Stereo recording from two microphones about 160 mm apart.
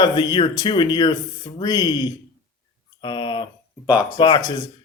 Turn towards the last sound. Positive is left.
turn(degrees=30)  # may be behind; listen again after turning